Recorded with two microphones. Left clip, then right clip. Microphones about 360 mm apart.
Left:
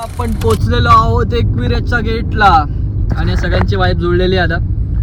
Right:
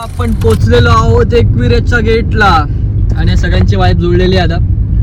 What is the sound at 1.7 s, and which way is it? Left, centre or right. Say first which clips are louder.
Speech: right 7 dB; right.